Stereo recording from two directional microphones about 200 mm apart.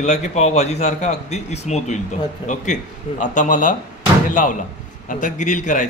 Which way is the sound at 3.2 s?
40° left (ahead or behind).